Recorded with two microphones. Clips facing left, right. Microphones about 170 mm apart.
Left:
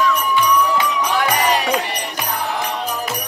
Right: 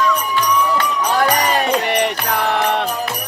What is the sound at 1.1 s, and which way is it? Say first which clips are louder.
Music: right 2 dB; 40° right (ahead or behind).